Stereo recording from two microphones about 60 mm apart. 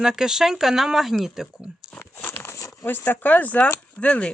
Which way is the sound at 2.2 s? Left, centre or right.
Left.